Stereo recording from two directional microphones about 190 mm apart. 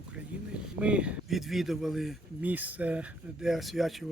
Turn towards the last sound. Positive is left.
turn(degrees=0)  # may be behind; listen again after turning